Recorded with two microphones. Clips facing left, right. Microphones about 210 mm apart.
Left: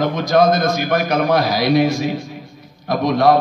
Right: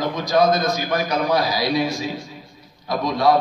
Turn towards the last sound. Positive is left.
turn(degrees=55)  # may be behind; listen again after turning